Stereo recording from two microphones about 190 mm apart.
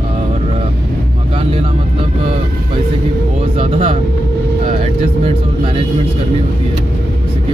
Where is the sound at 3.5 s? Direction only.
30° right (ahead or behind).